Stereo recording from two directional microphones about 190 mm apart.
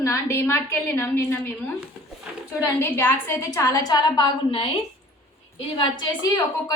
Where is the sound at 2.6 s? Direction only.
10° left (ahead or behind).